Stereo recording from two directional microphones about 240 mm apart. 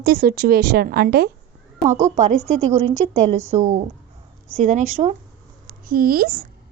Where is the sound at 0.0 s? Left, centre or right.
Right.